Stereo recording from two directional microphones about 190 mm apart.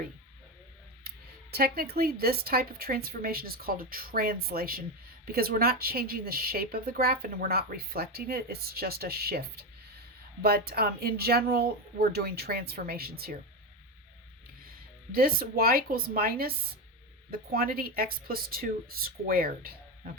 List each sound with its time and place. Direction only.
1.0 s a woman's voice: 55° right (ahead or behind)
15.1 s a woman's voice: 50° right (ahead or behind)